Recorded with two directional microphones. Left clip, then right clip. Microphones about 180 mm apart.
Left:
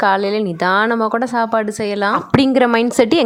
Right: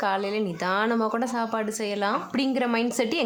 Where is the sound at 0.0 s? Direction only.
40° left (ahead or behind).